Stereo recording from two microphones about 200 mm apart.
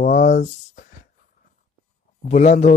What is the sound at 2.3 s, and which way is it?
Speech, 35° left (ahead or behind).